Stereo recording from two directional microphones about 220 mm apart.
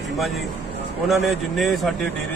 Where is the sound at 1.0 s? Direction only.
Centre (ahead or behind).